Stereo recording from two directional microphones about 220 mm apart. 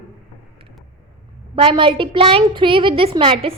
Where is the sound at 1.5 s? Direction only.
25° right (ahead or behind).